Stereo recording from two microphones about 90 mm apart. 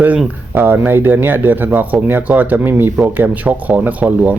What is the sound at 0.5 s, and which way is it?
Speech, 20° right (ahead or behind).